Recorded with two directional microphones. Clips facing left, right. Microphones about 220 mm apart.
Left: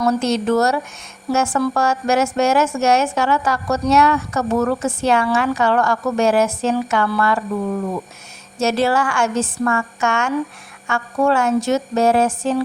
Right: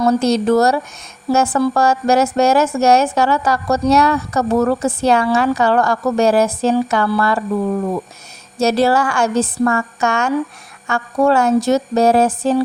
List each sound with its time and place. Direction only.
0.0 s a woman's voice: 35° right (ahead or behind)
8.5 s a woman's voice: 35° right (ahead or behind)